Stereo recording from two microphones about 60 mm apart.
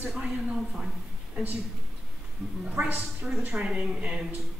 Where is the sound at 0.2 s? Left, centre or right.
Centre.